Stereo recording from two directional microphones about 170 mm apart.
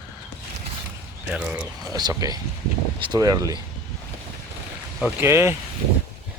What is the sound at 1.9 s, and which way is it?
Speech, 20° right (ahead or behind).